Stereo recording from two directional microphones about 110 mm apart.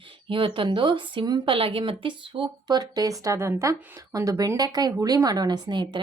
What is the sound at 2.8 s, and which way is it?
A woman's voice, 35° right (ahead or behind).